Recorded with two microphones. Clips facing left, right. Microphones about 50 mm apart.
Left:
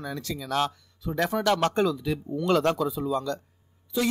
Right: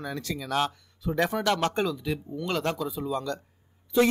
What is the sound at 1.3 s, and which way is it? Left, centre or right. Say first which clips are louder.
Speech: left 2 dB; right.